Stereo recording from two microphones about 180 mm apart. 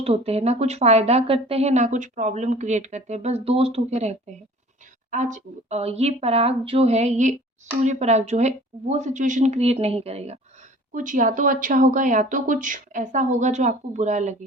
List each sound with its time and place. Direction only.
0.0 s speech: 35° right (ahead or behind)
10.9 s speech: 45° right (ahead or behind)